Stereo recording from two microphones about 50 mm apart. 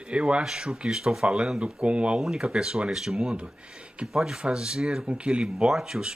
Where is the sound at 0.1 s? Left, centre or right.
Right.